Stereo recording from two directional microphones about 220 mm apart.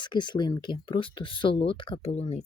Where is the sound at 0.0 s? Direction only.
20° left (ahead or behind).